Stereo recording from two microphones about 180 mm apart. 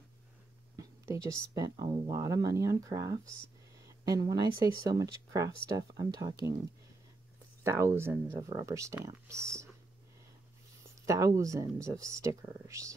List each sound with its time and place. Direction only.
0.7 s speech: 15° right (ahead or behind)
7.6 s speech: 15° right (ahead or behind)
11.1 s speech: 15° right (ahead or behind)